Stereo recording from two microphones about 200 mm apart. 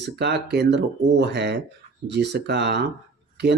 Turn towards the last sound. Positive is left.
turn(degrees=-55)  # may be behind; listen again after turning